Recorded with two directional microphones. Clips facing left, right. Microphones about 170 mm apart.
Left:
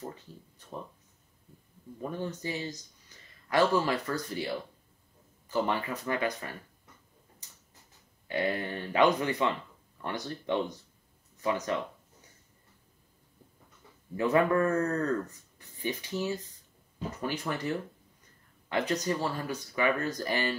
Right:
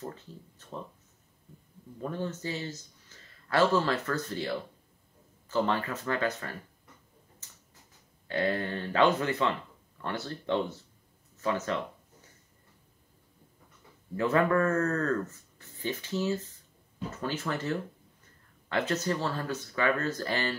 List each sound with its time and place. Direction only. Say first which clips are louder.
0.0 s speech: right 1 dB; 15° left (ahead or behind)
2.0 s speech: right 1 dB; 15° left (ahead or behind)
8.3 s speech: right 1 dB; 15° left (ahead or behind)
14.1 s speech: even; 15° left (ahead or behind)